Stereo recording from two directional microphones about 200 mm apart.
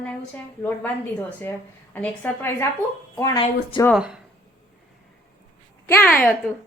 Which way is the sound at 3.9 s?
5° right (ahead or behind).